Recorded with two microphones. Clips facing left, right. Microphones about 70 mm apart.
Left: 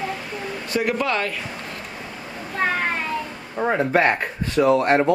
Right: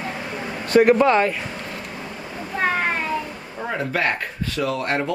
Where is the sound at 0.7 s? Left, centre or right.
Right.